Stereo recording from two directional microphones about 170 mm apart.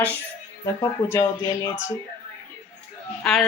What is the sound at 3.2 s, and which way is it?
Speech, 5° left (ahead or behind).